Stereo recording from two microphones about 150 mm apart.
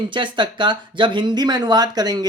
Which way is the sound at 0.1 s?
30° right (ahead or behind).